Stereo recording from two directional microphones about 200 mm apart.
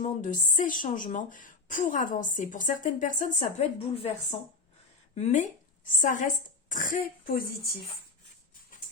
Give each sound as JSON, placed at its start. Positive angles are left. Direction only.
{"t": 0.0, "sound": "a woman's voice", "side_deg": 40}